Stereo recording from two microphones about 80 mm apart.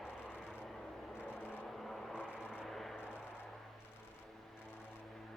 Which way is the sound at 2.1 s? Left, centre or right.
Centre.